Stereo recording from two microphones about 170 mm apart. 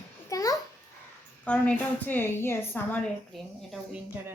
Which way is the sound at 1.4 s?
5° left (ahead or behind).